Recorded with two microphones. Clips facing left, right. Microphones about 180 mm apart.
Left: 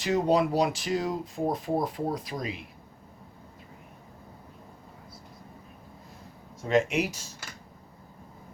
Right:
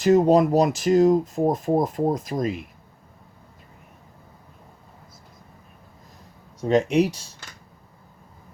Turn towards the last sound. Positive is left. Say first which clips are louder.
# right 5 dB
turn(degrees=-30)  # may be behind; listen again after turning